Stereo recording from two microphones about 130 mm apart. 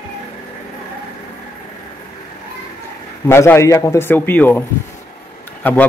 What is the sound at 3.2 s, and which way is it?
Speech, 20° left (ahead or behind).